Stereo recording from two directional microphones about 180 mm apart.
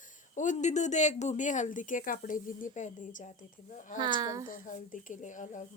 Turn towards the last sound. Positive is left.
turn(degrees=45)  # may be behind; listen again after turning